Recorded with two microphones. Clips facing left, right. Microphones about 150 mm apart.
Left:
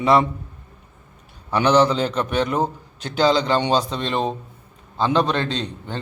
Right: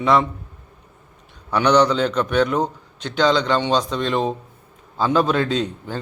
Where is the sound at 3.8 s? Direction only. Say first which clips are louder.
Right 2 dB; 30° left (ahead or behind).